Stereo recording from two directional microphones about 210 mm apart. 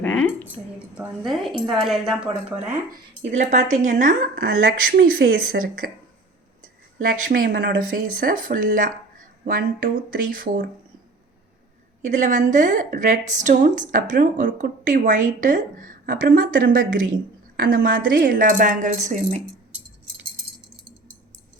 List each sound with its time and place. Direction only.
0.0 s a sound: 5° left (ahead or behind)
0.9 s a woman's voice: centre (ahead or behind)
3.2 s a woman's voice: 35° right (ahead or behind)
7.1 s a woman's voice: 45° right (ahead or behind)
12.0 s a woman's voice: 35° right (ahead or behind)